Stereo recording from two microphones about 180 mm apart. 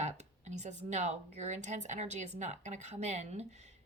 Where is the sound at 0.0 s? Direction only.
40° right (ahead or behind).